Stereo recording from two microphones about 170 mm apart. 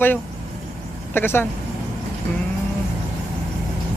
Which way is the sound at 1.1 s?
15° left (ahead or behind).